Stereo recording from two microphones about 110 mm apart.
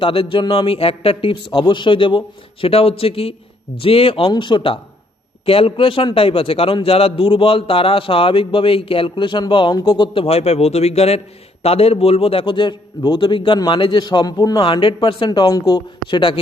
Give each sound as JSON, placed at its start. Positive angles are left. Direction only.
{"t": 0.0, "sound": "a man's voice", "side_deg": 55}
{"t": 4.3, "sound": "a man's voice", "side_deg": 45}
{"t": 10.2, "sound": "a man's voice", "side_deg": 70}
{"t": 15.4, "sound": "speech", "side_deg": 35}